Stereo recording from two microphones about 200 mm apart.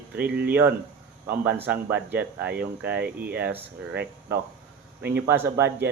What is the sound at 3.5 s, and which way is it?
Speech, 55° right (ahead or behind).